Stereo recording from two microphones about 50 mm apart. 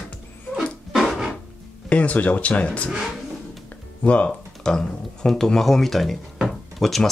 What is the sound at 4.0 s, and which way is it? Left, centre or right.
Speech, left.